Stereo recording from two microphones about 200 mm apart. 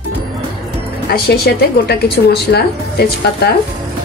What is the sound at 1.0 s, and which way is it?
A woman's voice, 55° left (ahead or behind).